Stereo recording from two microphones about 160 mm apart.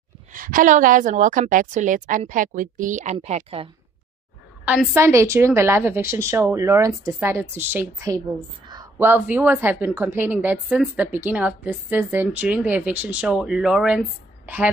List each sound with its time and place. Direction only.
0.3 s a woman's voice: 55° right (ahead or behind); by 3.6 s 40° right (ahead or behind)
4.6 s a woman's voice: 10° right (ahead or behind)